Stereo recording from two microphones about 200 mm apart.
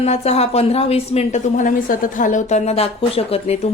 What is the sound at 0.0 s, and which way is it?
A woman's voice, 30° left (ahead or behind).